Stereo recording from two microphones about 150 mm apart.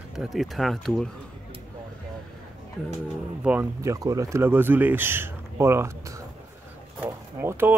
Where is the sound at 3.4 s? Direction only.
10° right (ahead or behind).